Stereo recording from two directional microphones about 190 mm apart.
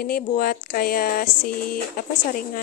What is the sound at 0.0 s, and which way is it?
Speech, 50° left (ahead or behind).